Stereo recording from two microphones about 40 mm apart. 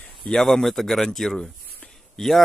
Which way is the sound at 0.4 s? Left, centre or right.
Centre.